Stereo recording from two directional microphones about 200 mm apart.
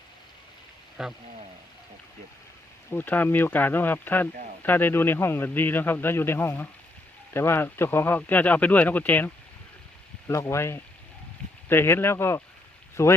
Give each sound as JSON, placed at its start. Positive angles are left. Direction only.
{"t": 1.0, "sound": "speech", "side_deg": 0}
{"t": 2.9, "sound": "a man's voice", "side_deg": 10}